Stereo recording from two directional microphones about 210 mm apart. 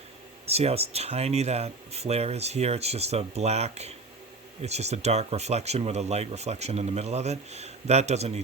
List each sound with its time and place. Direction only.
0.4 s speech: 30° right (ahead or behind)